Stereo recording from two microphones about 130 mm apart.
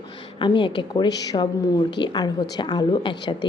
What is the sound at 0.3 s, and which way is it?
A woman's voice, 40° left (ahead or behind).